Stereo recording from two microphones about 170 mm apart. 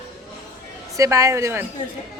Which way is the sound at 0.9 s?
20° right (ahead or behind).